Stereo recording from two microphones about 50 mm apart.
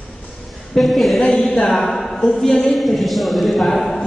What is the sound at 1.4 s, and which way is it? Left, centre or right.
Speech, centre.